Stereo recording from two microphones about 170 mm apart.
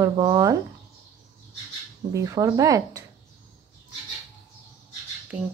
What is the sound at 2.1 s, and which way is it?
Speech, 20° right (ahead or behind).